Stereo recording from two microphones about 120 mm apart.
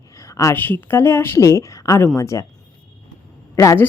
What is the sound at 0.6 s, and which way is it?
A woman's voice, 15° left (ahead or behind).